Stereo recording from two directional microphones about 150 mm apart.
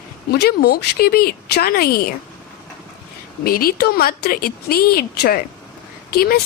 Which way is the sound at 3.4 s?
80° left.